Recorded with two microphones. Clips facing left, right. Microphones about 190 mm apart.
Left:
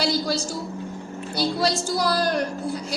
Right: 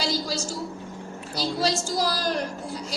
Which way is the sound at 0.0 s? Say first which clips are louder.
Left 4 dB; 60° left (ahead or behind).